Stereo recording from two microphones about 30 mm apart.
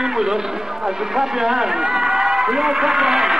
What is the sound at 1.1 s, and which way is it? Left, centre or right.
Run, centre.